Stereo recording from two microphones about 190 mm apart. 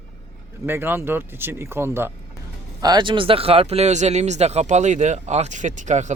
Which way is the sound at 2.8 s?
25° right (ahead or behind).